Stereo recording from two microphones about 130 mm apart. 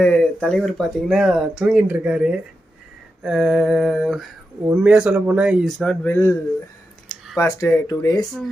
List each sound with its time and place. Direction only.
0.0 s speech: 10° left (ahead or behind)
6.1 s speech: 20° left (ahead or behind)
7.3 s speech: 20° left (ahead or behind)